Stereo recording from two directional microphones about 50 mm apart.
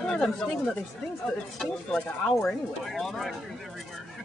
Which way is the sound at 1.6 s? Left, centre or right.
Centre.